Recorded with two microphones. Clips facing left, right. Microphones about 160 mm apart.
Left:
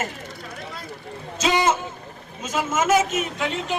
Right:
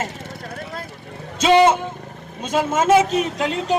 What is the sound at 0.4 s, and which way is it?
Vehicle, 50° right (ahead or behind).